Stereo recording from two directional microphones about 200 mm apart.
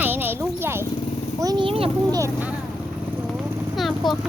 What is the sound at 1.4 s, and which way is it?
Speech, 20° right (ahead or behind).